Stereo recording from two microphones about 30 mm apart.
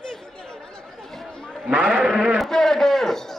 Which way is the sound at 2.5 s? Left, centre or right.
Centre.